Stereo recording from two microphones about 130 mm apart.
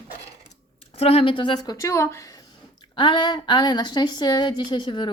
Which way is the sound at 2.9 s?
40° left (ahead or behind).